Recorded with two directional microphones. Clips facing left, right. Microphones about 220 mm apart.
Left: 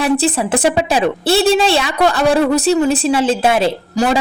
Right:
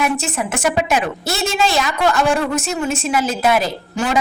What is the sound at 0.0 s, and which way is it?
A woman's voice, 35° left (ahead or behind).